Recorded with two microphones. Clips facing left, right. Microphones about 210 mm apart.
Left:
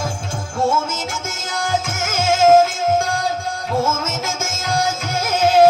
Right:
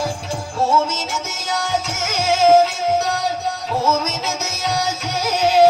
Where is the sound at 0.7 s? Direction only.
50° left (ahead or behind).